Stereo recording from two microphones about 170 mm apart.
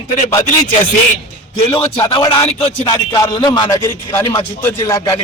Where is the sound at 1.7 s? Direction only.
30° left (ahead or behind).